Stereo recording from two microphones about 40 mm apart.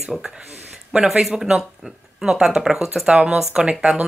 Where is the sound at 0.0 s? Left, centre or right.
Centre.